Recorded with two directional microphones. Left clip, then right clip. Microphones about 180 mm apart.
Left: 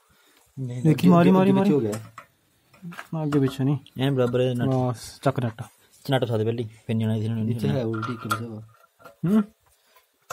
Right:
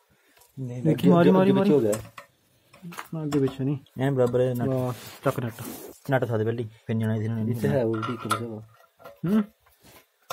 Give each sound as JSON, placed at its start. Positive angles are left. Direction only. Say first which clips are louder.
{"t": 0.7, "sound": "a man's voice", "louder": "left 1 dB", "side_deg": 60}
{"t": 3.1, "sound": "a man's voice", "louder": "left 2 dB", "side_deg": 65}
{"t": 3.9, "sound": "speech", "louder": "right 1 dB", "side_deg": 20}
{"t": 4.7, "sound": "speech", "louder": "left 3 dB", "side_deg": 70}
{"t": 6.0, "sound": "speech", "louder": "left 1 dB", "side_deg": 15}
{"t": 9.2, "sound": "speech", "louder": "left 2 dB", "side_deg": 75}